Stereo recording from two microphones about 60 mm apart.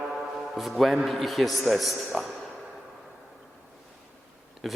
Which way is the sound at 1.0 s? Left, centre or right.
Centre.